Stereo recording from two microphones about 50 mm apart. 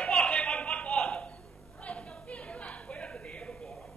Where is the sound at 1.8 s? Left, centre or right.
Left.